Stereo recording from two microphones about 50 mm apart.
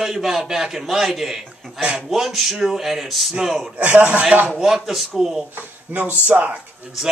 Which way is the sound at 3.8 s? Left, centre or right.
Right.